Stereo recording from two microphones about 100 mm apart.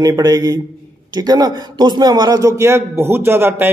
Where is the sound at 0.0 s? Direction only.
40° right (ahead or behind).